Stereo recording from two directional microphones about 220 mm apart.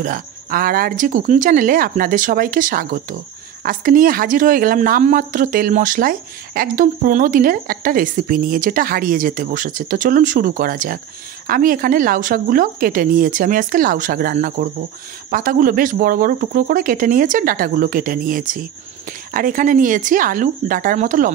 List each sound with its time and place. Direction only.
0.0 s speech: 40° right (ahead or behind)